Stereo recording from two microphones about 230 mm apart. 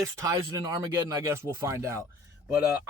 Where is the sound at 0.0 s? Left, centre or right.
Centre.